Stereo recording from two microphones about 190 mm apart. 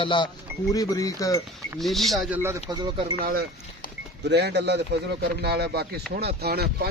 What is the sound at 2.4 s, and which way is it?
Speech, 20° right (ahead or behind).